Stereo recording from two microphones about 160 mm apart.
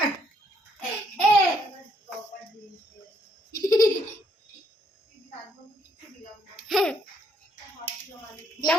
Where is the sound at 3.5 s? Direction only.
20° left (ahead or behind).